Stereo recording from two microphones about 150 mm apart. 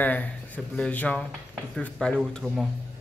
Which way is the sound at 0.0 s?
10° left (ahead or behind).